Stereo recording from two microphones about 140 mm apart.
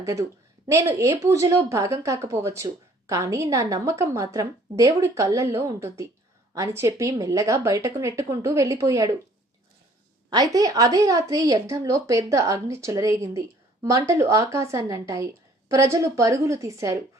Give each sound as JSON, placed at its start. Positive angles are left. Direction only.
{"t": 0.0, "sound": "a woman's voice", "side_deg": -20}
{"t": 10.5, "sound": "a woman's voice", "side_deg": -25}